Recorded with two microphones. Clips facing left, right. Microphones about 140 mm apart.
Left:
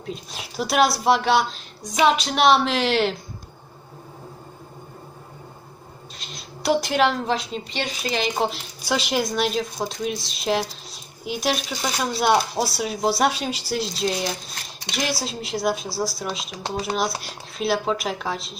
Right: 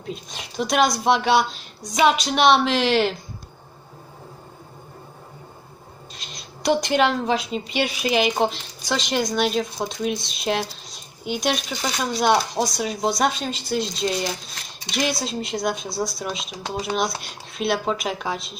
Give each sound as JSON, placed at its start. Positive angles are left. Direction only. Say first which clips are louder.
{"t": 0.0, "sound": "speech", "louder": "even", "side_deg": 0}
{"t": 6.1, "sound": "speech", "louder": "left 2 dB", "side_deg": 0}
{"t": 8.4, "sound": "speech", "louder": "right 2 dB", "side_deg": 5}